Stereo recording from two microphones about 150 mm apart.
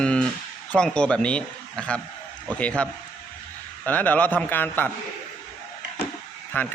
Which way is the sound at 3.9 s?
10° left (ahead or behind).